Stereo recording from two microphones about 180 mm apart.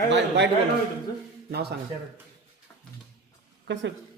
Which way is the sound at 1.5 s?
65° right (ahead or behind).